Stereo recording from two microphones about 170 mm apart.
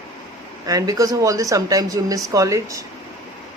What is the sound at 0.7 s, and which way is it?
Speech, 20° right (ahead or behind).